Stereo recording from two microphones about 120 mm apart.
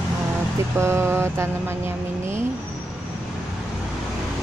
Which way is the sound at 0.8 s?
20° right (ahead or behind).